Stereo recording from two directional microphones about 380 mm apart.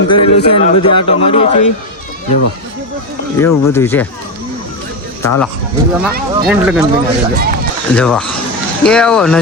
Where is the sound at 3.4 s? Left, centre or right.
Centre.